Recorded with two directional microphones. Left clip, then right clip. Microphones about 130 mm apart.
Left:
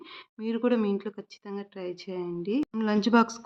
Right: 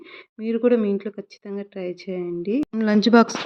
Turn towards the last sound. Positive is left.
turn(degrees=-35)  # may be behind; listen again after turning